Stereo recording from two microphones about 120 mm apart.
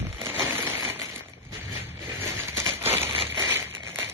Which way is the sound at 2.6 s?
20° right (ahead or behind).